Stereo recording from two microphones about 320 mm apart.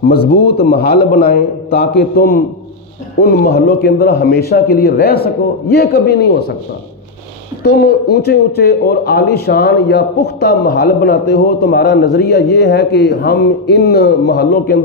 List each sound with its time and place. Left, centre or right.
0.6 s a man's voice: left
7.6 s a man's voice: left